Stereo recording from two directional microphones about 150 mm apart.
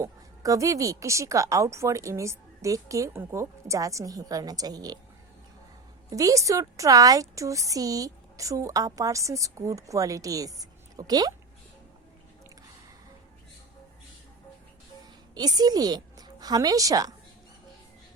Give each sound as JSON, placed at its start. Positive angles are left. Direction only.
{"t": 0.0, "sound": "a woman's voice", "side_deg": -20}
{"t": 6.1, "sound": "a woman's voice", "side_deg": -20}
{"t": 15.4, "sound": "a woman's voice", "side_deg": -25}